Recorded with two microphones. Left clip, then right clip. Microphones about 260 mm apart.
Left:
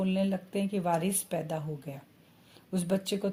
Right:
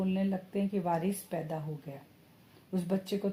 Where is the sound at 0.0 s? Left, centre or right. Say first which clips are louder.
Left 3 dB; left.